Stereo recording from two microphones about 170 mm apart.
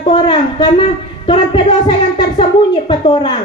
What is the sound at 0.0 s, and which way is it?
A woman's voice, 30° left (ahead or behind).